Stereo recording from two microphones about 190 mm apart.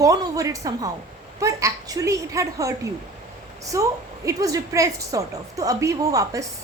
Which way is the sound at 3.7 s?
15° right (ahead or behind).